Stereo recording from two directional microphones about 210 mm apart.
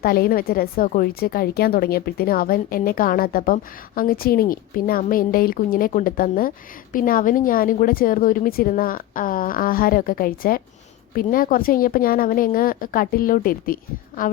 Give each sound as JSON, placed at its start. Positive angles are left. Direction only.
{"t": 0.0, "sound": "a woman's voice", "side_deg": 45}